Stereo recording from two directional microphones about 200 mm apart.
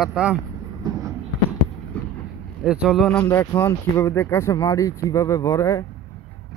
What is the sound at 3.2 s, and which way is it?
Speech, 15° left (ahead or behind).